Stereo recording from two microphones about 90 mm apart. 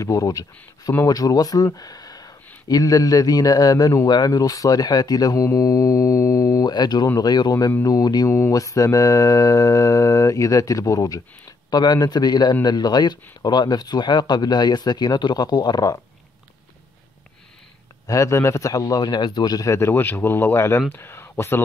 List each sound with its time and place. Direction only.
0.0 s mantra: 35° left (ahead or behind)
1.0 s speech: 45° left (ahead or behind)
6.7 s speech: 50° left (ahead or behind)
8.3 s mantra: 30° left (ahead or behind)
11.7 s speech: 50° left (ahead or behind)
18.0 s mantra: 35° left (ahead or behind)
20.9 s speech: 25° left (ahead or behind)